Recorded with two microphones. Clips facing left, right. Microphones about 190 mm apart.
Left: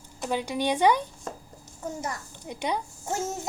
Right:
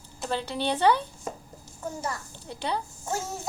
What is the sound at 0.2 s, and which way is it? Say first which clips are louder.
A child's voice: left 2 dB; 10° left (ahead or behind).